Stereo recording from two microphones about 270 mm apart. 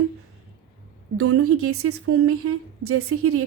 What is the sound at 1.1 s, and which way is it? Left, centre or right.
Speech, right.